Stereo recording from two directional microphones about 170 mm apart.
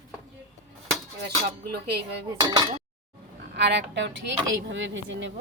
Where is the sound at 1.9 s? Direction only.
75° right (ahead or behind).